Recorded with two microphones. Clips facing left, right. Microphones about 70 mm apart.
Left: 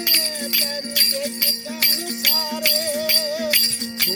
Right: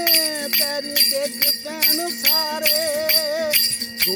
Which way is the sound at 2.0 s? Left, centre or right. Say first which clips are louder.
Right 3 dB; right.